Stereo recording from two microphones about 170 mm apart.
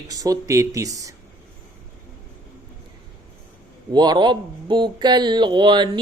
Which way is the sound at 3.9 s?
25° right (ahead or behind).